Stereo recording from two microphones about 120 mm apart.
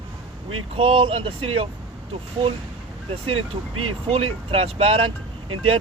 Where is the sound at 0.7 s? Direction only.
50° right (ahead or behind).